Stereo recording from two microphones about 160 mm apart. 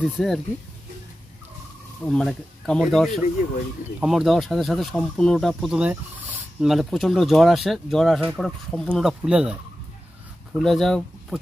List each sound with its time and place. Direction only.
0.0 s speech: centre (ahead or behind)
2.0 s speech: centre (ahead or behind)